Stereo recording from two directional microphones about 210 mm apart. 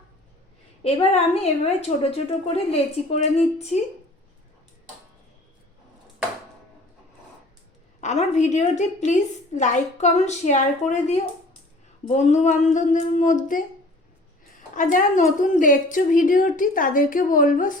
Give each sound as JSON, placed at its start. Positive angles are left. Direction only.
{"t": 0.8, "sound": "a woman's voice", "side_deg": 30}
{"t": 8.0, "sound": "a woman's voice", "side_deg": 35}
{"t": 14.8, "sound": "a woman's voice", "side_deg": 40}